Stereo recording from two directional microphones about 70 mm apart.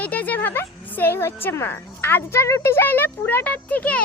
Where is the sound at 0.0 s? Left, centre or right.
Left.